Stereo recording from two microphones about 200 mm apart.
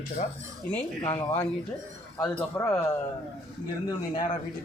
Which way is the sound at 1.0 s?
20° left (ahead or behind).